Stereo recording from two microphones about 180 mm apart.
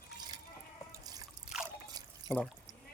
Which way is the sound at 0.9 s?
20° right (ahead or behind).